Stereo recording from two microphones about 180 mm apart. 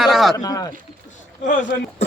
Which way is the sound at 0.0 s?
Centre (ahead or behind).